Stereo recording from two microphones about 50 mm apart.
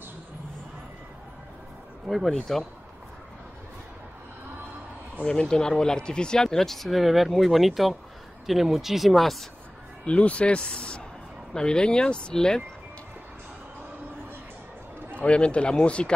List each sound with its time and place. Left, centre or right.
2.0 s speech: centre
5.2 s speech: centre
10.0 s speech: left
15.1 s speech: left